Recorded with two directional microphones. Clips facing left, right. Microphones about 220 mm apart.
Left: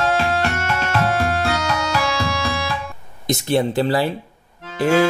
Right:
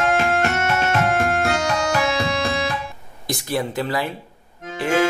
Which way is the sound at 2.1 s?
20° right (ahead or behind).